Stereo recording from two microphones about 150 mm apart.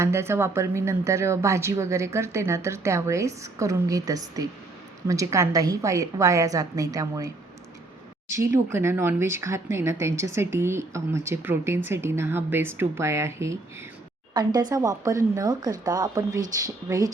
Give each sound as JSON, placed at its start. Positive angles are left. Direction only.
{"t": 0.0, "sound": "speech", "side_deg": -15}